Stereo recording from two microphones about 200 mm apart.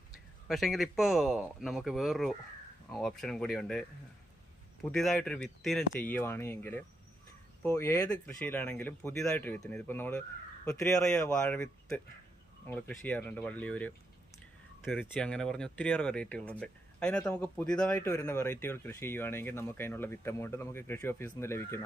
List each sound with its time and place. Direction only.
0.4 s speech: centre (ahead or behind)